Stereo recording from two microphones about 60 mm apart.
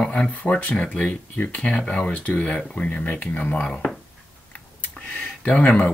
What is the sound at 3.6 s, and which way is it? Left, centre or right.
Speech, centre.